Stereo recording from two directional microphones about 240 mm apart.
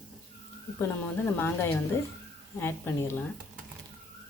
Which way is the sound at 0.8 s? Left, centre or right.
Centre.